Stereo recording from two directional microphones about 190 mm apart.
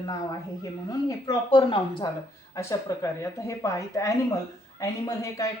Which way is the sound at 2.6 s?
15° left (ahead or behind).